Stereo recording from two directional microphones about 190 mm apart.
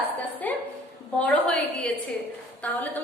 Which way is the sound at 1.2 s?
5° left (ahead or behind).